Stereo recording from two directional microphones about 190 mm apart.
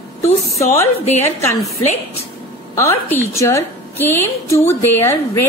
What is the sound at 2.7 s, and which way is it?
A woman's voice, 15° left (ahead or behind).